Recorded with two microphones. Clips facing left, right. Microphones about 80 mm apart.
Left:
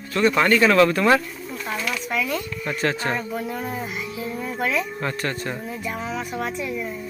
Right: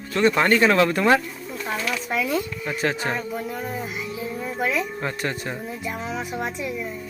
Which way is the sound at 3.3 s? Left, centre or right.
Centre.